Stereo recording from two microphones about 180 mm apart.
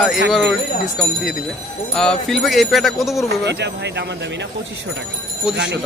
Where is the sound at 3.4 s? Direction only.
70° right (ahead or behind).